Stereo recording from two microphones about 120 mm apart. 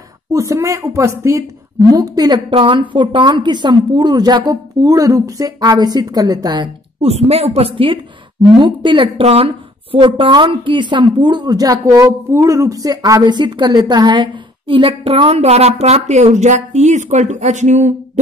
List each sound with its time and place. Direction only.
0.3 s a woman's voice: 25° right (ahead or behind)
2.5 s a woman's voice: 45° right (ahead or behind)
7.0 s a woman's voice: 60° right (ahead or behind); by 18.2 s 75° right (ahead or behind)